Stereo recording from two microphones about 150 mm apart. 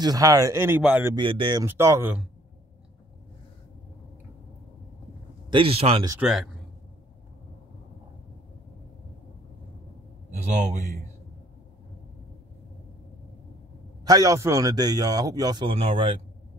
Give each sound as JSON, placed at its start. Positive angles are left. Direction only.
{"t": 0.0, "sound": "speech", "side_deg": -25}
{"t": 1.1, "sound": "speech", "side_deg": -30}
{"t": 1.6, "sound": "speech", "side_deg": -20}
{"t": 5.5, "sound": "speech", "side_deg": -40}
{"t": 6.2, "sound": "a man's voice", "side_deg": 0}
{"t": 14.0, "sound": "speech", "side_deg": -25}
{"t": 15.7, "sound": "speech", "side_deg": -40}